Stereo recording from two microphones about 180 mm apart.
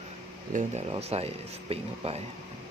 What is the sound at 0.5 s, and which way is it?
Speech, 35° right (ahead or behind).